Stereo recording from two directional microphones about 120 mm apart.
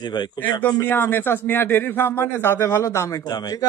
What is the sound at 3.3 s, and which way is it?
Speech, 35° left (ahead or behind).